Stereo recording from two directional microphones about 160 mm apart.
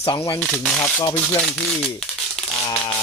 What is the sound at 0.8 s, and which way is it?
Speech, 10° left (ahead or behind).